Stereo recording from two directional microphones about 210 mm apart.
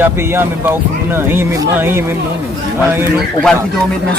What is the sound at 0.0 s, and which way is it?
Speech, 10° right (ahead or behind).